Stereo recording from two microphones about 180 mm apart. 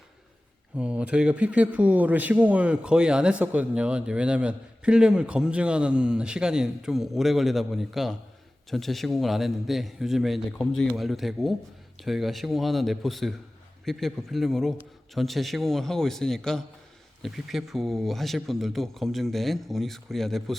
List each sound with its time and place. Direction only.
0.8 s a man's voice: 5° right (ahead or behind)